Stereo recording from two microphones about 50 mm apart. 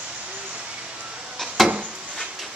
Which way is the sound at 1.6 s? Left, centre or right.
Centre.